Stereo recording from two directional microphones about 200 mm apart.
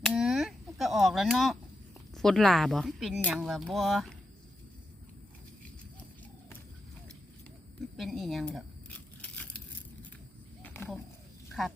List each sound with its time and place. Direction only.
0.0 s a sound: centre (ahead or behind)
2.1 s speech: centre (ahead or behind)
7.9 s speech: centre (ahead or behind)
10.6 s wild animals: 10° left (ahead or behind)